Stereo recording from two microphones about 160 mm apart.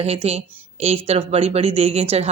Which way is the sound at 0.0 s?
40° right (ahead or behind).